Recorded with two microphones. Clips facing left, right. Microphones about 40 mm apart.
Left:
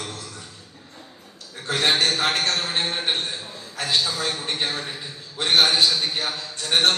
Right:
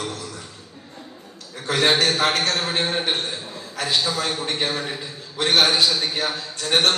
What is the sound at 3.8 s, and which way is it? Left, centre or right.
Speech, right.